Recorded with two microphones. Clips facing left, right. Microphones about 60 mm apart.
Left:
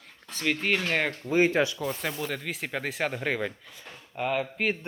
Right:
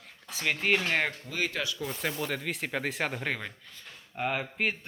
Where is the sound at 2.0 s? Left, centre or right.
Centre.